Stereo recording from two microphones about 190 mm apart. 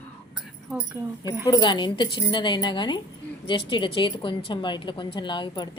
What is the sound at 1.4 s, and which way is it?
A woman's voice, 20° left (ahead or behind).